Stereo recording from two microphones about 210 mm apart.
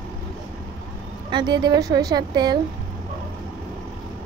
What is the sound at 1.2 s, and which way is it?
A woman's voice, 20° right (ahead or behind).